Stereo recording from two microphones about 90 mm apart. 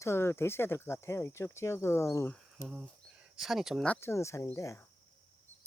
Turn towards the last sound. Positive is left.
turn(degrees=35)  # may be behind; listen again after turning